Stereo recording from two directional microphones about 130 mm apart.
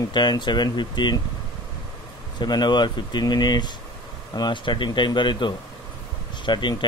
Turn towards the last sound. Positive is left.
turn(degrees=35)  # may be behind; listen again after turning